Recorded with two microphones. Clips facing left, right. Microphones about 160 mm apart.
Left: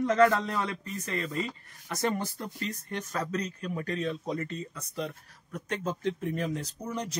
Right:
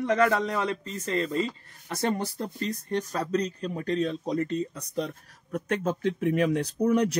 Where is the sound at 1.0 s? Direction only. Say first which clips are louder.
Right 6 dB; 30° right (ahead or behind).